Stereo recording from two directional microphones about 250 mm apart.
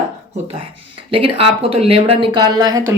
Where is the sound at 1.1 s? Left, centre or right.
Right.